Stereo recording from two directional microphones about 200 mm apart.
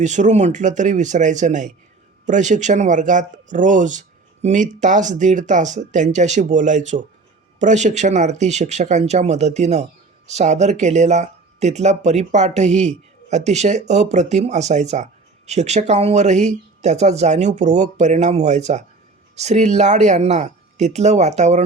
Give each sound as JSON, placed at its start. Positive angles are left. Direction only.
{"t": 0.0, "sound": "speech", "side_deg": -35}